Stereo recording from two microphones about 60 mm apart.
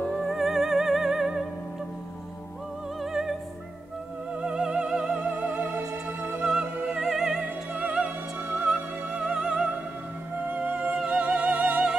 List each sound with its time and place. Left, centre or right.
0.1 s music: centre
3.0 s music: centre
4.4 s music: centre; by 6.4 s right
6.4 s music: centre
7.4 s music: centre
10.5 s music: right
11.1 s opera: centre